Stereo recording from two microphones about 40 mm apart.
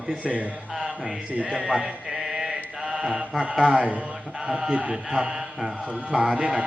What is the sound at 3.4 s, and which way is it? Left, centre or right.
A man's voice, centre.